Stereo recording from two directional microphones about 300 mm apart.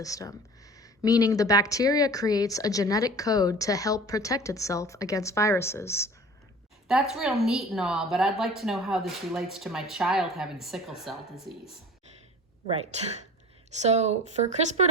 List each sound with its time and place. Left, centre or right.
0.0 s speech: centre
6.8 s a woman's voice: centre
12.7 s speech: right